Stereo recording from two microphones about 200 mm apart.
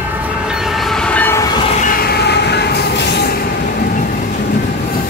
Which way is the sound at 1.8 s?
50° left (ahead or behind).